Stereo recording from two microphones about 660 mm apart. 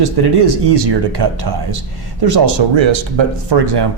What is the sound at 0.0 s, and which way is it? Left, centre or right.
Speech, right.